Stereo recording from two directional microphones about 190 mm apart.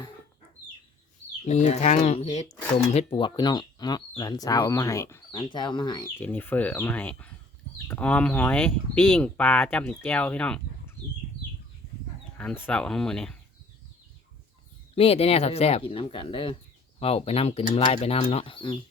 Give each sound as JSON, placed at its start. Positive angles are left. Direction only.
{"t": 1.5, "sound": "speech", "side_deg": 35}
{"t": 6.1, "sound": "speech", "side_deg": 10}
{"t": 12.4, "sound": "speech", "side_deg": 5}
{"t": 14.9, "sound": "speech", "side_deg": 30}